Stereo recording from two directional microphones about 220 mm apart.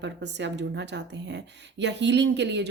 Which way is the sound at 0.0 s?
50° right (ahead or behind).